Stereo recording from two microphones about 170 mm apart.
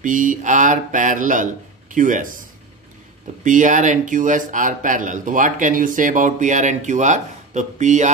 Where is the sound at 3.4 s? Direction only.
50° right (ahead or behind).